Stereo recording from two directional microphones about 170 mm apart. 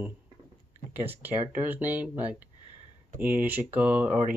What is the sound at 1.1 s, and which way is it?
Speech, 10° right (ahead or behind).